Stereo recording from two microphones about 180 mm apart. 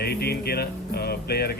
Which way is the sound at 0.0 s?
60° left (ahead or behind).